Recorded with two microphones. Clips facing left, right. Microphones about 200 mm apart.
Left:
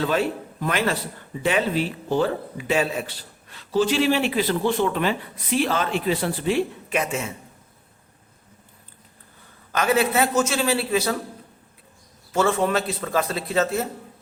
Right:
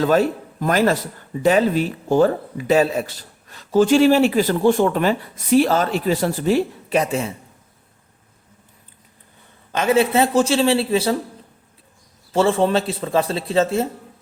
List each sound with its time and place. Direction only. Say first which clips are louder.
0.0 s a man's voice: right 6 dB; 40° right (ahead or behind)
9.7 s a man's voice: right 4 dB; 25° right (ahead or behind)
12.3 s a man's voice: right 4 dB; 30° right (ahead or behind)